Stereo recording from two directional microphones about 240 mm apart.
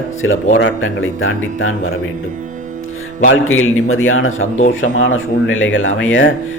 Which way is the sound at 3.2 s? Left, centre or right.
Left.